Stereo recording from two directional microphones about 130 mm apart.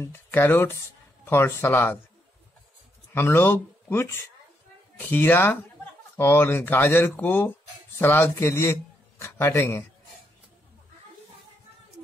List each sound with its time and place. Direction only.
0.0 s speech: 15° left (ahead or behind)
3.2 s speech: 15° left (ahead or behind)